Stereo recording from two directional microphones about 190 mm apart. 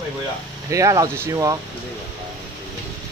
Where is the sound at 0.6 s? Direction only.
15° right (ahead or behind).